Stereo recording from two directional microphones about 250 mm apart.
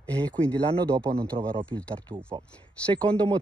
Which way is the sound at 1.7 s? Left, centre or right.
Centre.